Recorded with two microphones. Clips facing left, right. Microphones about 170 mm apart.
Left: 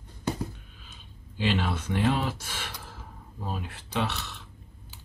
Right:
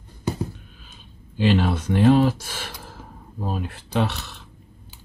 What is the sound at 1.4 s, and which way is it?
Speech, 40° right (ahead or behind).